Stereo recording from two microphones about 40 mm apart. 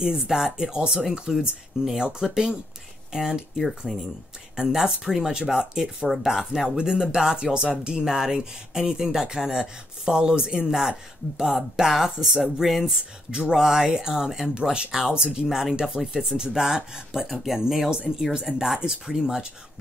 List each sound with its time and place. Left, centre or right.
0.0 s speech: centre
1.3 s speech: centre
2.0 s speech: centre
3.5 s speech: centre
4.6 s speech: centre
17.8 s speech: right